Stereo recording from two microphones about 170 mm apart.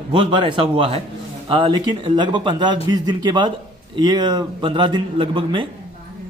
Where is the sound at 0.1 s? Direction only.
30° right (ahead or behind).